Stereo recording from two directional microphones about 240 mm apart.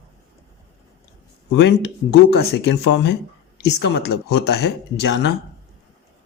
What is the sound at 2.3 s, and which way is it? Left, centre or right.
Speech, left.